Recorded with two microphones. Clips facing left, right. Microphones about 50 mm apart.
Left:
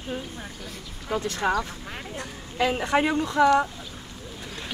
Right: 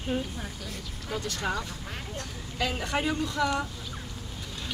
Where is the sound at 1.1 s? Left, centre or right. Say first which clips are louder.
Left 6 dB; left.